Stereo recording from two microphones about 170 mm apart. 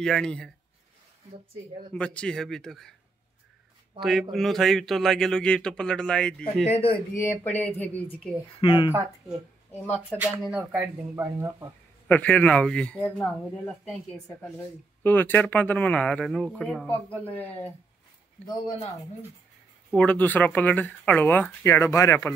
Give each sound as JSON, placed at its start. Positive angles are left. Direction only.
{"t": 0.0, "sound": "speech", "side_deg": 5}
{"t": 2.0, "sound": "speech", "side_deg": 5}
{"t": 4.0, "sound": "speech", "side_deg": 0}
{"t": 6.6, "sound": "speech", "side_deg": 35}
{"t": 7.4, "sound": "speech", "side_deg": 10}
{"t": 8.5, "sound": "speech", "side_deg": 30}
{"t": 9.7, "sound": "speech", "side_deg": 10}
{"t": 10.2, "sound": "speech", "side_deg": -10}
{"t": 12.1, "sound": "speech", "side_deg": 10}
{"t": 15.0, "sound": "speech", "side_deg": 10}
{"t": 20.0, "sound": "speech", "side_deg": 10}